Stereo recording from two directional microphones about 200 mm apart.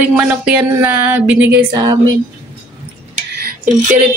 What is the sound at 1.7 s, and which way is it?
Speech, 20° right (ahead or behind).